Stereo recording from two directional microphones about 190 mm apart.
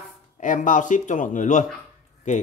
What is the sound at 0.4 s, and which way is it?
Speech, 40° left (ahead or behind).